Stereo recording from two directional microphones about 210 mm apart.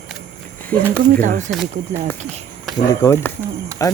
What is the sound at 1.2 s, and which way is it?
Speech, 35° right (ahead or behind).